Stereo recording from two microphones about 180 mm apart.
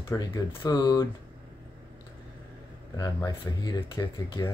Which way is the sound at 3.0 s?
20° left (ahead or behind).